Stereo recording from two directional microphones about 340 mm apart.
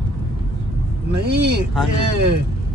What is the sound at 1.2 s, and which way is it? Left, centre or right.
Speech, right.